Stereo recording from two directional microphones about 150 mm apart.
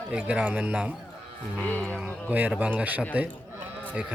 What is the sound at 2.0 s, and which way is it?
A man's voice, 10° right (ahead or behind).